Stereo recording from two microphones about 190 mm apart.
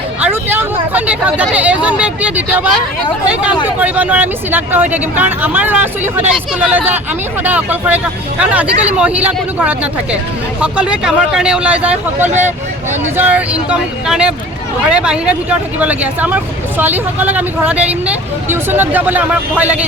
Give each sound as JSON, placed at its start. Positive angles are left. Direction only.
{"t": 0.2, "sound": "speech", "side_deg": -10}
{"t": 12.3, "sound": "speech", "side_deg": -40}
{"t": 13.1, "sound": "speech", "side_deg": -10}